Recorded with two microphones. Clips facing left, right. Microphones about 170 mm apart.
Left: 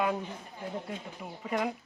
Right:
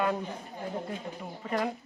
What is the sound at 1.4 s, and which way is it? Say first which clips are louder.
Speech: right 1 dB; 5° left (ahead or behind).